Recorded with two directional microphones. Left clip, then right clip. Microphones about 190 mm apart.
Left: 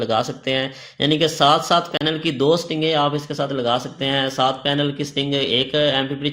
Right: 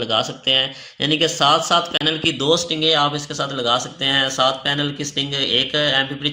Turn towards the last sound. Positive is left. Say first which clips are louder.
# right 1 dB
turn(degrees=50)  # may be behind; listen again after turning